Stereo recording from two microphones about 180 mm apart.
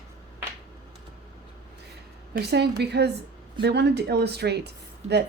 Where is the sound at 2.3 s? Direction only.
65° right (ahead or behind).